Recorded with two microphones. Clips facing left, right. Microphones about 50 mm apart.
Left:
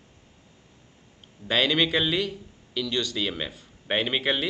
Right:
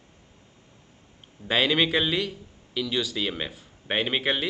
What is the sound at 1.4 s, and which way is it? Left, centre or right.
Speech, centre.